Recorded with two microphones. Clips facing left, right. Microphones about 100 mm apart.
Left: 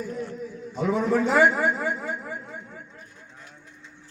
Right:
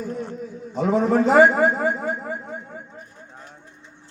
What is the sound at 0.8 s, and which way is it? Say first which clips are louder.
A man's voice: right 4 dB; 50° right (ahead or behind).